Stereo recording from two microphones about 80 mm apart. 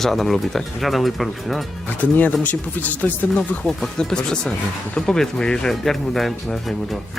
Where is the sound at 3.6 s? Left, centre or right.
Centre.